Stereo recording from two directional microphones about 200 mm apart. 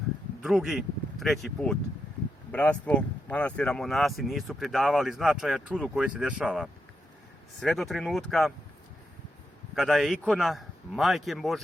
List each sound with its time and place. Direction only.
0.4 s speech: 5° right (ahead or behind)
9.7 s speech: centre (ahead or behind)